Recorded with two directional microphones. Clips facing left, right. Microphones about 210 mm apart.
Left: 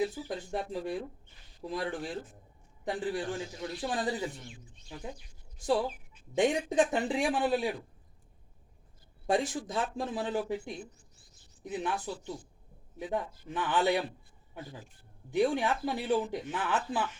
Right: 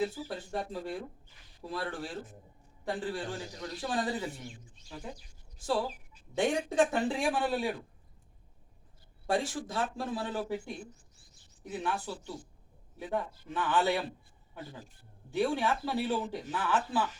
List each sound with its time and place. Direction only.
0.0 s speech: 15° left (ahead or behind)
5.5 s speech: 15° left (ahead or behind)
9.2 s speech: 20° left (ahead or behind)
11.6 s speech: 15° left (ahead or behind)
15.3 s speech: 15° left (ahead or behind)